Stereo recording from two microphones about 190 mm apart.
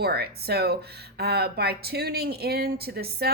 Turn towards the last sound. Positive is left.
turn(degrees=-55)  # may be behind; listen again after turning